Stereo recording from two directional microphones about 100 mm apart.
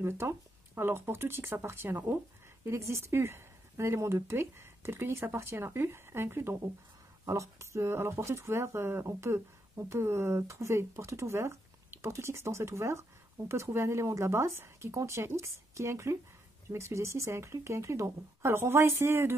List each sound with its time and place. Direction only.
0.0 s speech: 25° right (ahead or behind)